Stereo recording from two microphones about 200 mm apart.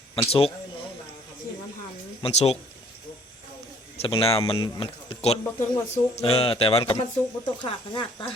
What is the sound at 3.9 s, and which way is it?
Speech, 30° left (ahead or behind).